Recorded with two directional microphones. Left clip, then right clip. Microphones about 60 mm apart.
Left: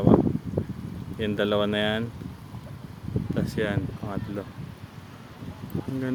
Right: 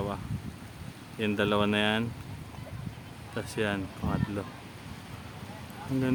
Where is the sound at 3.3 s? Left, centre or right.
Left.